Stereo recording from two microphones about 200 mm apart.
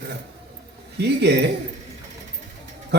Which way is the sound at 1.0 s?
55° right (ahead or behind).